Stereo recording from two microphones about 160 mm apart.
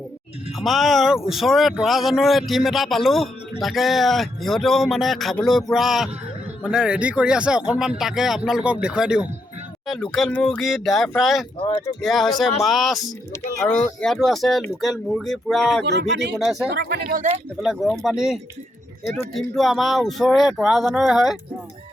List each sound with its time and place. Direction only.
0.6 s speech: centre (ahead or behind)
15.8 s speech: 90° right
16.4 s speech: centre (ahead or behind)
16.7 s speech: 80° right
17.6 s speech: centre (ahead or behind)